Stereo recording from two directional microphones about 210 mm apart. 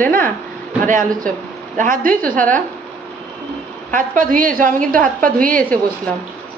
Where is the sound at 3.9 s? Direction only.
40° right (ahead or behind).